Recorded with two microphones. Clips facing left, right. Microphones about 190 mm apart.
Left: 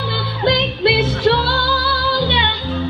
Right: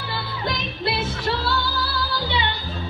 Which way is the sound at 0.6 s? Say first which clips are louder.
Left 10 dB; 90° left.